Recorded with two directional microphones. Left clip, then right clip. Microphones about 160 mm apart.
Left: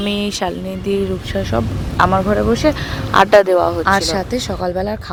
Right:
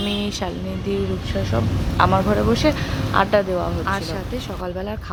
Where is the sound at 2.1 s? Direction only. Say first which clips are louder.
Left 4 dB; 35° left (ahead or behind).